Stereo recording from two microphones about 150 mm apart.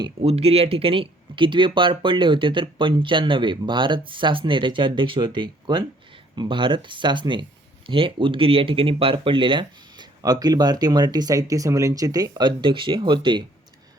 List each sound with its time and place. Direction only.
0.2 s speech: 45° right (ahead or behind)